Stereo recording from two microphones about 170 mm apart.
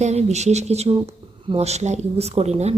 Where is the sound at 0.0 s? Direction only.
40° right (ahead or behind).